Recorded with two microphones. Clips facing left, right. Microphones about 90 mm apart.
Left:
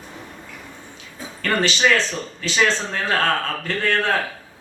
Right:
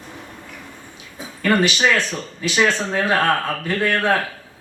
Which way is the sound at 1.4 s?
15° right (ahead or behind).